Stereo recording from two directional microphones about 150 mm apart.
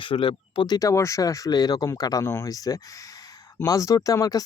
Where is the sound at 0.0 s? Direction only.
35° left (ahead or behind).